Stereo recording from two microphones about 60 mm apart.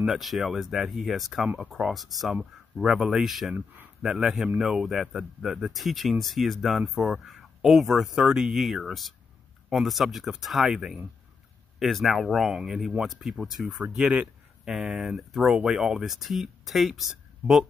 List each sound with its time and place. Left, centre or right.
0.0 s speech: centre
3.5 s speech: right
4.0 s a man's voice: centre